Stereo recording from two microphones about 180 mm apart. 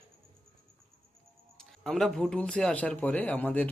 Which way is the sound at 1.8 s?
5° left (ahead or behind).